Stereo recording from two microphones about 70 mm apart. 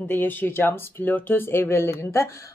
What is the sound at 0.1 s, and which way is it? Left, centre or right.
Speech, left.